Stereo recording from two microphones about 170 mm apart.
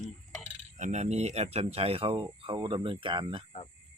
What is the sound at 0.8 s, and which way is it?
Speech, 45° right (ahead or behind).